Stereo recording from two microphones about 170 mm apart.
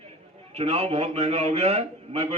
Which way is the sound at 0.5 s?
35° right (ahead or behind).